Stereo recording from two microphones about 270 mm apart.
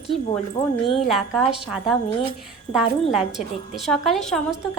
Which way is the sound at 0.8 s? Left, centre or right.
Centre.